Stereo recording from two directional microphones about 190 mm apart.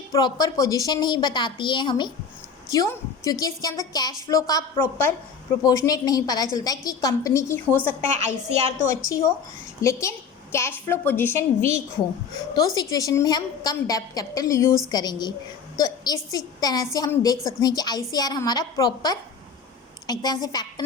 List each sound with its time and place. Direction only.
0.1 s a woman's voice: 20° left (ahead or behind)